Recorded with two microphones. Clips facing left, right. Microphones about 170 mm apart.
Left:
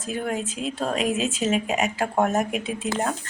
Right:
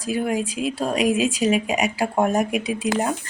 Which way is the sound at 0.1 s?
10° right (ahead or behind).